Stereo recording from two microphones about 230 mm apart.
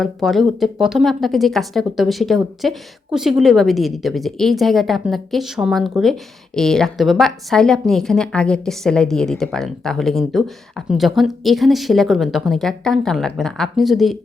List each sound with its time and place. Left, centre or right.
0.0 s a woman's voice: centre